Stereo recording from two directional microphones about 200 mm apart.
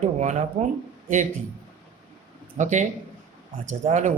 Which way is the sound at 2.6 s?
35° right (ahead or behind).